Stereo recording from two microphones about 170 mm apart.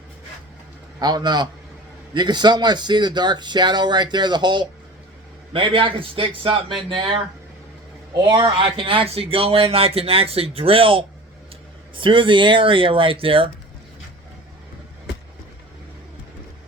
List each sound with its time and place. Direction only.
0.9 s speech: 25° right (ahead or behind)
8.2 s speech: 25° right (ahead or behind)